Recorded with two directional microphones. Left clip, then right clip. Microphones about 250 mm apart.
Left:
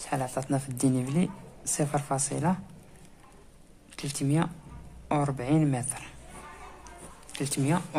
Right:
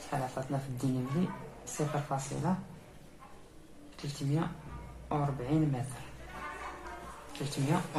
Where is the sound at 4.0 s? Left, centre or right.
Left.